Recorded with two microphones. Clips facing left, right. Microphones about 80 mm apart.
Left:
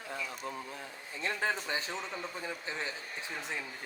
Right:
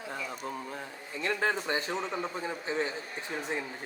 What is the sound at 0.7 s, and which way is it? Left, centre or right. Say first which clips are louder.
Speech: right 4 dB; right.